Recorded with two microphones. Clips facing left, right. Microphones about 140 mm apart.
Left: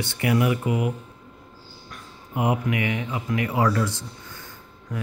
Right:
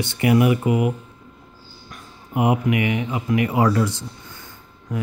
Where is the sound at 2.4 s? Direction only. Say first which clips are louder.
Right 4 dB; 15° right (ahead or behind).